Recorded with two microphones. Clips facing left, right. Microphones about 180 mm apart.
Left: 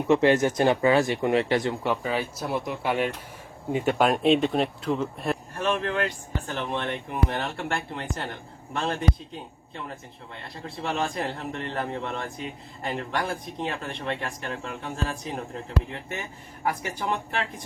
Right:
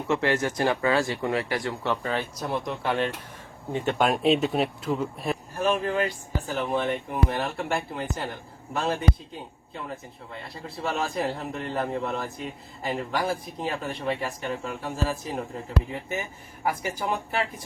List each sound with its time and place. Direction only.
0.1 s speech: 20° left (ahead or behind); by 17.4 s 5° right (ahead or behind)